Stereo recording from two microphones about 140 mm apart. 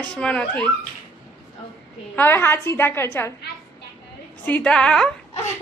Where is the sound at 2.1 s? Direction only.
15° left (ahead or behind).